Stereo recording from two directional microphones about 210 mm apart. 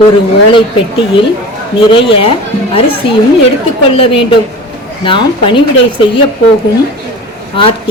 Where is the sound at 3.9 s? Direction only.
25° left (ahead or behind).